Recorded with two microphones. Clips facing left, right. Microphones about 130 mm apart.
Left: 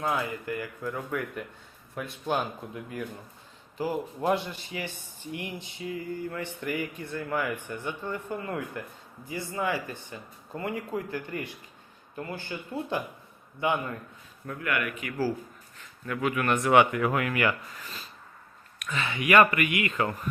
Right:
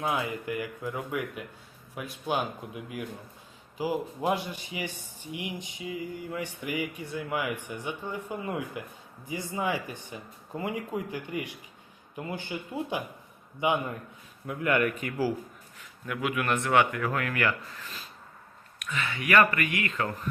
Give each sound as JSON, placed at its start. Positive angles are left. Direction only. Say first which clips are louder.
{"t": 0.0, "sound": "speech", "louder": "even", "side_deg": -20}
{"t": 14.6, "sound": "speech", "louder": "right 5 dB", "side_deg": -30}
{"t": 15.8, "sound": "a man's voice", "louder": "left 3 dB", "side_deg": -5}
{"t": 16.6, "sound": "speech", "louder": "left 5 dB", "side_deg": 20}
{"t": 17.2, "sound": "speech", "louder": "even", "side_deg": 10}
{"t": 18.9, "sound": "speech", "louder": "left 3 dB", "side_deg": 20}